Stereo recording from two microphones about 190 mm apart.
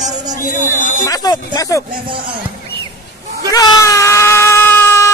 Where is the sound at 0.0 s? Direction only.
20° right (ahead or behind).